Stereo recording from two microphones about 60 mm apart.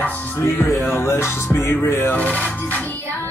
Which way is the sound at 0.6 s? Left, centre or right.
Left.